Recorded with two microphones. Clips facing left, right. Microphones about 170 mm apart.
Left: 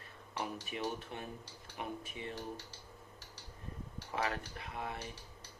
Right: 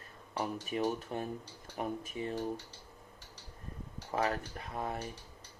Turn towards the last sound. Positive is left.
turn(degrees=-40)  # may be behind; listen again after turning